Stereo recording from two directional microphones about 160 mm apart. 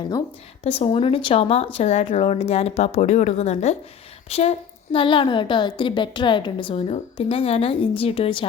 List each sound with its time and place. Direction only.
0.6 s a woman's voice: 40° left (ahead or behind)